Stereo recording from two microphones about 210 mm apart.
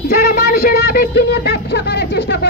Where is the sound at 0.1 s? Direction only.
45° left (ahead or behind).